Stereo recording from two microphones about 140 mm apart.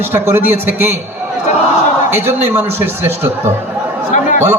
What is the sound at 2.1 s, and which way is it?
A man's voice, 15° right (ahead or behind).